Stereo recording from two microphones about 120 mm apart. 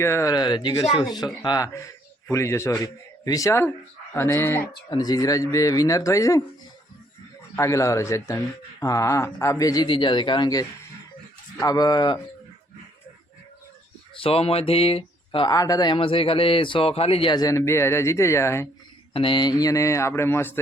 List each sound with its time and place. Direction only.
0.0 s speech: 25° left (ahead or behind)
0.3 s a man's voice: 40° left (ahead or behind); by 4.6 s 20° left (ahead or behind)
4.9 s speech: 35° left (ahead or behind)
7.5 s speech: 25° left (ahead or behind)
9.8 s speech: 40° left (ahead or behind)
14.2 s speech: 50° left (ahead or behind)
15.5 s speech: 30° left (ahead or behind)
16.0 s speech: 50° left (ahead or behind)
17.3 s speech: 30° left (ahead or behind)
19.1 s speech: 45° left (ahead or behind); by 20.6 s 20° left (ahead or behind)